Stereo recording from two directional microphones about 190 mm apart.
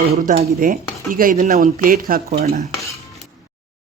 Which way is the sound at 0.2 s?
45° right (ahead or behind).